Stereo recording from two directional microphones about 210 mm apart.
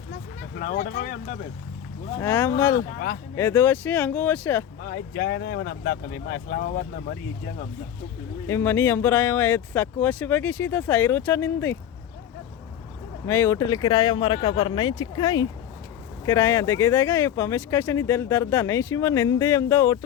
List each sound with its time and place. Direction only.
0.1 s speech: 45° left (ahead or behind)
2.1 s speech: 10° left (ahead or behind)
2.7 s speech: 50° left (ahead or behind)
3.3 s speech: 10° left (ahead or behind)
4.8 s speech: 60° left (ahead or behind)
8.4 s speech: 10° left (ahead or behind)
13.2 s speech: 10° left (ahead or behind)